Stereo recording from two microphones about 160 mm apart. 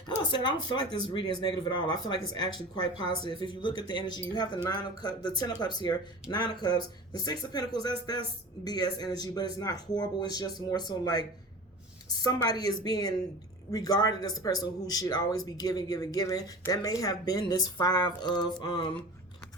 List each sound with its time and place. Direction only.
0.2 s speech: 30° left (ahead or behind)